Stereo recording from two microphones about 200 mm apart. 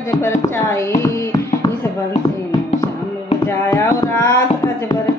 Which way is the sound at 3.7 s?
15° left (ahead or behind).